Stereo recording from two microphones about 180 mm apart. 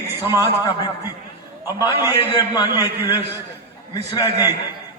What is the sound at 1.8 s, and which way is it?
A man's voice, 20° left (ahead or behind).